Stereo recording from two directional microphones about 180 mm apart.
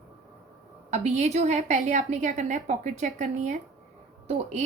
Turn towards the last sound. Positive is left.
turn(degrees=-35)  # may be behind; listen again after turning